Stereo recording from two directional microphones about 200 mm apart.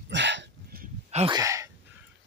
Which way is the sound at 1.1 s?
30° right (ahead or behind).